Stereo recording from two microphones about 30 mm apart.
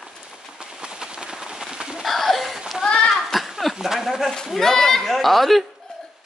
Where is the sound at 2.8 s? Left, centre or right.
Left.